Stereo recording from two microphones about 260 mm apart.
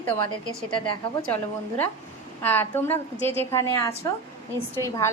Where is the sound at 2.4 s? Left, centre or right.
Centre.